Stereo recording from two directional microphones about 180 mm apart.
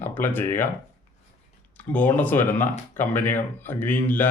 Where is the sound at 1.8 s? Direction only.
10° left (ahead or behind).